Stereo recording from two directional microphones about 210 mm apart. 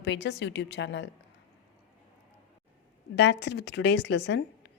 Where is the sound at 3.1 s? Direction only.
55° left (ahead or behind).